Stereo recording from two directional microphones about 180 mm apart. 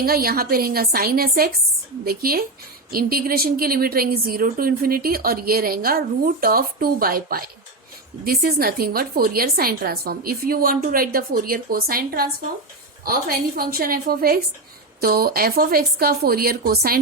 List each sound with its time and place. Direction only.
0.0 s a woman's voice: 55° right (ahead or behind)